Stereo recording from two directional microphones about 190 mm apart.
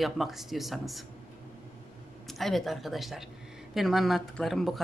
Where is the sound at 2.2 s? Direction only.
Centre (ahead or behind).